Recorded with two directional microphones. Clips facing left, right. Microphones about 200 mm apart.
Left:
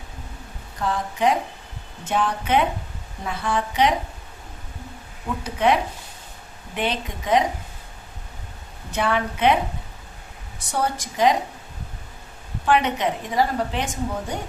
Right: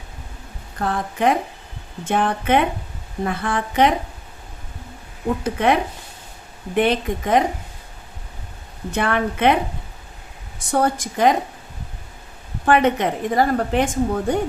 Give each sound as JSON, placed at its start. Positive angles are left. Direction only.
{"t": 0.8, "sound": "a woman's voice", "side_deg": -55}
{"t": 5.4, "sound": "a woman's voice", "side_deg": -55}
{"t": 9.0, "sound": "a woman's voice", "side_deg": -55}
{"t": 10.7, "sound": "a woman's voice", "side_deg": -50}
{"t": 12.6, "sound": "a woman's voice", "side_deg": -50}